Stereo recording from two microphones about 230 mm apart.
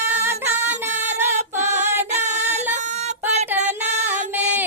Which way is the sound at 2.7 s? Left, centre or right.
Right.